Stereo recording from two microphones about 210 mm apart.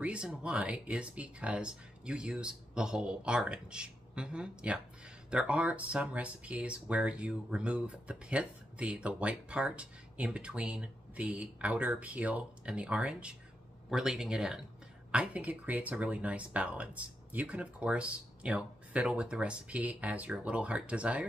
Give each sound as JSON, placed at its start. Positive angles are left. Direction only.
{"t": 0.0, "sound": "speech", "side_deg": -5}